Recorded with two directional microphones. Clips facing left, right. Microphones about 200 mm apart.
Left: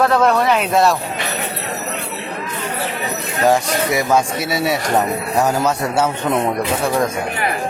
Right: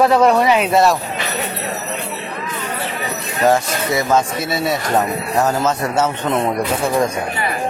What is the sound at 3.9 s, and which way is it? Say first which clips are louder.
Speech: right 1 dB; 10° left (ahead or behind).